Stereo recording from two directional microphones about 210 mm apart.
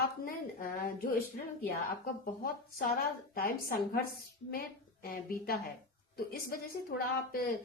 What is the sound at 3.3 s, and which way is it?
Speech, 45° left (ahead or behind).